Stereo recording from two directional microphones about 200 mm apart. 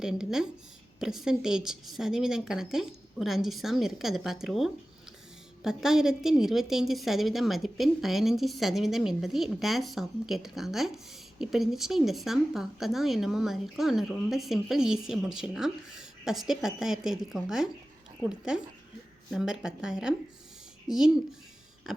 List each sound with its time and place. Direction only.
0.0 s a woman's voice: 5° right (ahead or behind)